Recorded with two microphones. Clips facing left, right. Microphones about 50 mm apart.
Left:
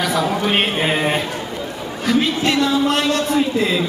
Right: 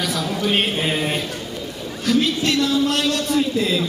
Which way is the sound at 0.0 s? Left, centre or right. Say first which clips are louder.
Left 4 dB; centre.